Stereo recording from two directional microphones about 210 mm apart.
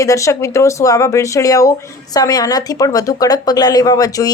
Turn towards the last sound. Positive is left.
turn(degrees=15)  # may be behind; listen again after turning